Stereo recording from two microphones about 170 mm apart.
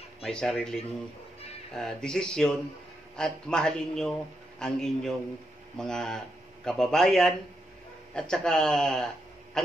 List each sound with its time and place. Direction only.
0.2 s a man's voice: 5° left (ahead or behind)
1.8 s a man's voice: 5° left (ahead or behind)